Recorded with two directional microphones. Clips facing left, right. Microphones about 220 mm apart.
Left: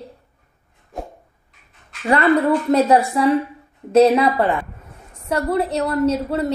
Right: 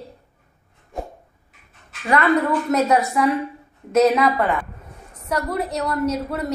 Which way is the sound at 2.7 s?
30° left (ahead or behind).